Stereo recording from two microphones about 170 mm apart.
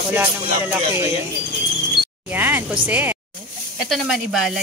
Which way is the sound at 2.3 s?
10° right (ahead or behind).